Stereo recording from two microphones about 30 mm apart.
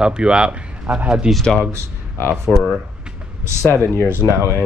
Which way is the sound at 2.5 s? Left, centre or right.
Left.